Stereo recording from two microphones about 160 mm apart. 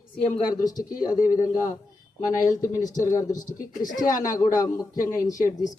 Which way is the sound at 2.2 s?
50° left (ahead or behind).